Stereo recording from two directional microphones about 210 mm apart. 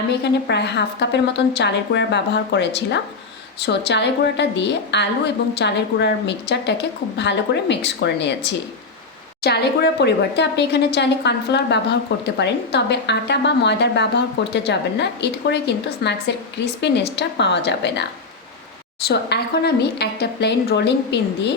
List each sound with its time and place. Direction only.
0.1 s a woman's voice: 55° left (ahead or behind)